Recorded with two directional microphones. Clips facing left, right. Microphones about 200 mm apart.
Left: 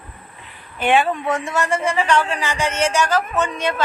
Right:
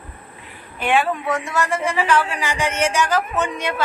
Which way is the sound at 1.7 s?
5° right (ahead or behind).